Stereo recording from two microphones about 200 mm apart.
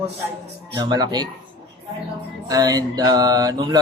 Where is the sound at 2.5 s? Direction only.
20° right (ahead or behind).